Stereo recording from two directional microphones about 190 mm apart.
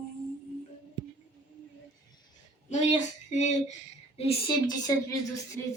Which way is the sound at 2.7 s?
40° left (ahead or behind).